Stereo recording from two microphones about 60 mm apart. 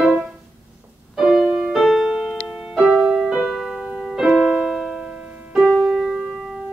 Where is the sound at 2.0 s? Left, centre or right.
Centre.